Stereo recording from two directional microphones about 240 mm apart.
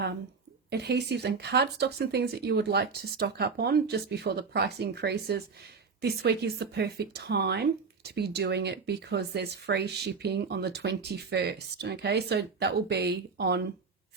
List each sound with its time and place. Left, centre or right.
0.7 s speech: right